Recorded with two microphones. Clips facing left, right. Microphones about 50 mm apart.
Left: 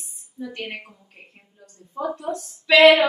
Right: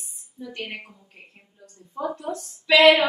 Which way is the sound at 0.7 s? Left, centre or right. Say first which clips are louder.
Left 2 dB; centre.